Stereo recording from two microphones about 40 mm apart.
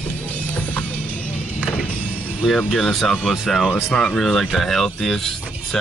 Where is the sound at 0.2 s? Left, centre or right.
Left.